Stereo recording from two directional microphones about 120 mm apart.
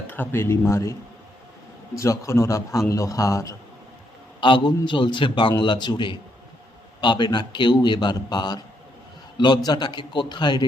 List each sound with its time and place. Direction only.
0.1 s speech: 15° left (ahead or behind)
2.0 s speech: 25° left (ahead or behind)
4.4 s a man's voice: 40° left (ahead or behind)